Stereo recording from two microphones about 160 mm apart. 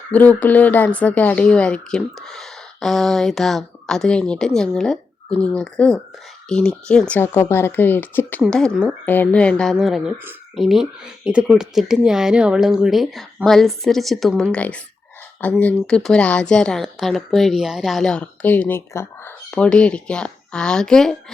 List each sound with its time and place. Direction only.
0.1 s speech: 10° left (ahead or behind)